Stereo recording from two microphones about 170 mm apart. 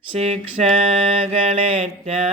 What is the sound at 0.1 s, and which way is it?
Mantra, 35° right (ahead or behind).